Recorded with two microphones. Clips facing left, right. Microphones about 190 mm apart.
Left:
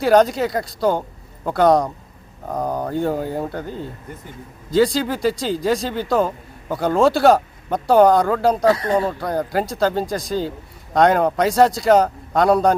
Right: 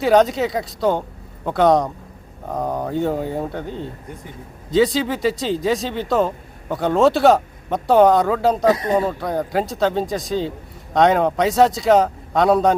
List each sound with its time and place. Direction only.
0.0 s speech: centre (ahead or behind)
8.6 s speech: 20° right (ahead or behind)
9.0 s speech: centre (ahead or behind)